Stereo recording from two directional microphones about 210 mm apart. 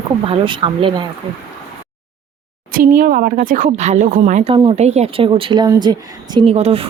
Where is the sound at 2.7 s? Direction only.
40° right (ahead or behind).